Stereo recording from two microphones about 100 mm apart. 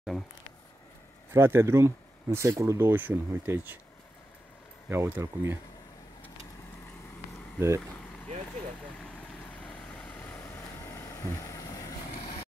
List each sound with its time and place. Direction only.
1.3 s speech: 25° right (ahead or behind)
4.8 s speech: 25° right (ahead or behind)
7.5 s speech: 25° right (ahead or behind)
9.4 s vehicle: 15° left (ahead or behind); by 11.9 s 35° left (ahead or behind)